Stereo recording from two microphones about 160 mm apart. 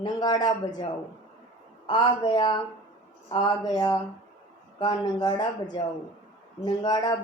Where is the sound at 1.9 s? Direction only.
30° left (ahead or behind).